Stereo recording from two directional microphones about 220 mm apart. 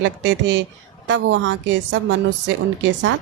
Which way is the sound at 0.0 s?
55° right (ahead or behind).